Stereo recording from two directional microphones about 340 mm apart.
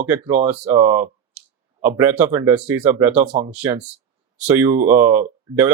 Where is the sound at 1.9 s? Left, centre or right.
Centre.